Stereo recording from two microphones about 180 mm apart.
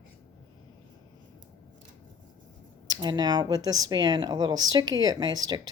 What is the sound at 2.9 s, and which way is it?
Speech, 25° right (ahead or behind).